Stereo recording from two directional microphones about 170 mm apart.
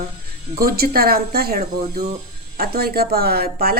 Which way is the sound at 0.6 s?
60° right (ahead or behind).